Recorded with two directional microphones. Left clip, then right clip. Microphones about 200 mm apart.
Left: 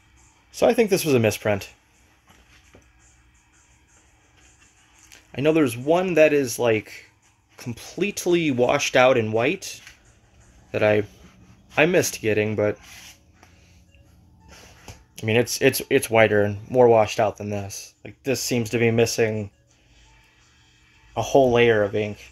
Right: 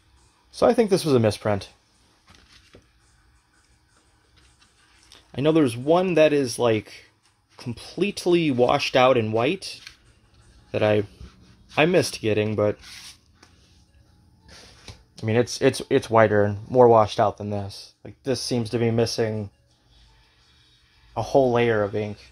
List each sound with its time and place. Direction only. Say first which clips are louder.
0.5 s speech: even; 15° right (ahead or behind)
5.1 s speech: even; 20° right (ahead or behind)
15.1 s speech: left 2 dB; 15° right (ahead or behind)
21.1 s speech: left 2 dB; 5° right (ahead or behind)